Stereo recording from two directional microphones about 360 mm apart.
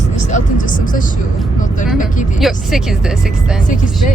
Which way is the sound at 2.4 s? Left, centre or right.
Centre.